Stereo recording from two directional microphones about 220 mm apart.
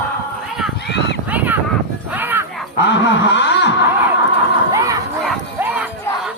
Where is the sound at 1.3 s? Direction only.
5° right (ahead or behind).